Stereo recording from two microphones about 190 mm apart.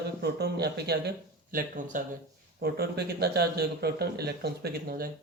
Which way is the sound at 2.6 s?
55° right (ahead or behind).